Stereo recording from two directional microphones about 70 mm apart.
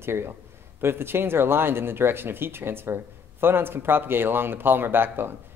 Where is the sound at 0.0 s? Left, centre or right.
Right.